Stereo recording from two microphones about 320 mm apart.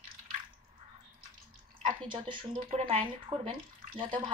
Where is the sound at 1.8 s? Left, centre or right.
Centre.